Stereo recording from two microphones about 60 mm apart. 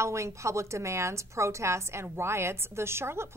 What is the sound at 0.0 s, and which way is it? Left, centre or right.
A woman's voice, right.